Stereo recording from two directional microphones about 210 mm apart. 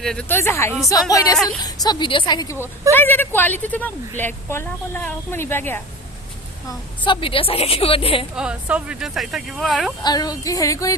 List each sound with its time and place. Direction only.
0.0 s a woman's voice: 5° left (ahead or behind)
6.7 s a woman's voice: 25° left (ahead or behind)
8.4 s speech: 5° right (ahead or behind)
10.0 s a woman's voice: 20° left (ahead or behind)